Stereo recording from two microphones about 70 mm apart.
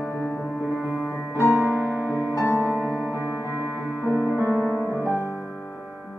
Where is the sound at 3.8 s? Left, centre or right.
Centre.